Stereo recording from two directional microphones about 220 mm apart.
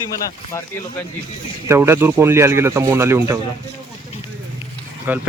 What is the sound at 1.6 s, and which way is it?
Speech, 10° right (ahead or behind).